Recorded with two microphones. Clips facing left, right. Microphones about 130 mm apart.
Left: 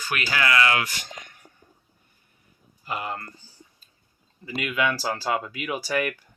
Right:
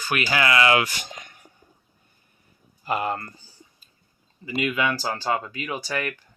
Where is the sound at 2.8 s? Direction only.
50° right (ahead or behind).